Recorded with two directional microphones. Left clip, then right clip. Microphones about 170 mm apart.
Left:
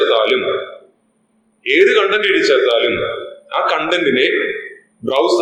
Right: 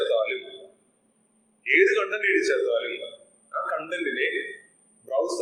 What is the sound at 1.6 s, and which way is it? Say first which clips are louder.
A man's voice: left 9 dB; 25° left (ahead or behind).